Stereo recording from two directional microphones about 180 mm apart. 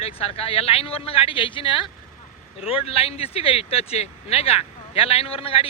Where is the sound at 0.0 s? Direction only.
30° left (ahead or behind).